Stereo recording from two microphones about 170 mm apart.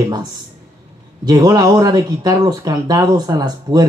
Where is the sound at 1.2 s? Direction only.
25° right (ahead or behind).